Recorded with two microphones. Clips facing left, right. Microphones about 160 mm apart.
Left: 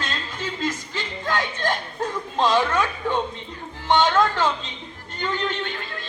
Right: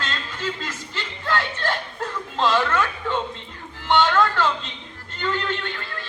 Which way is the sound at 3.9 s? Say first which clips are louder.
Even; 20° left (ahead or behind).